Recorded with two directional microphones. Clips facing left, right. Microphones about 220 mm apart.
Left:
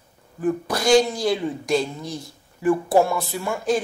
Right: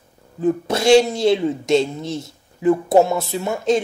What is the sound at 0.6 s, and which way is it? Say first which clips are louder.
Speech: right 4 dB; 25° right (ahead or behind).